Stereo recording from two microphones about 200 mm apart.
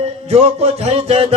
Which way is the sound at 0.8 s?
30° right (ahead or behind).